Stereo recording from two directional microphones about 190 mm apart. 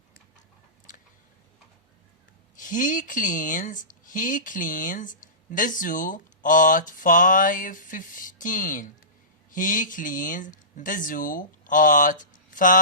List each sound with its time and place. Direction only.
2.6 s a man's voice: 45° left (ahead or behind)